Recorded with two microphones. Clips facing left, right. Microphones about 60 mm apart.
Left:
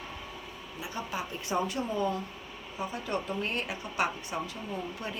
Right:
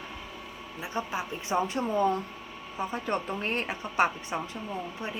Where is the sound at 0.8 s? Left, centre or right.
Right.